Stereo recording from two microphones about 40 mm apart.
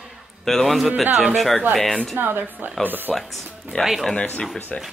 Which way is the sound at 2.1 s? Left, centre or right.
Right.